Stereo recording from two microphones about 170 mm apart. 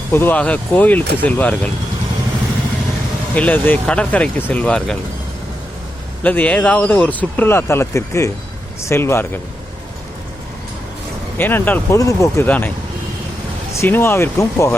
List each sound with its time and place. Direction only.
0.1 s speech: 10° left (ahead or behind)
3.3 s speech: 10° left (ahead or behind)
6.2 s speech: 10° left (ahead or behind)
11.3 s speech: 10° left (ahead or behind)
13.7 s speech: 15° left (ahead or behind)